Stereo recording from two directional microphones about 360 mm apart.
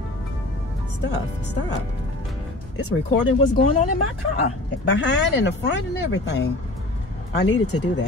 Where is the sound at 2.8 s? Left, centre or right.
Left.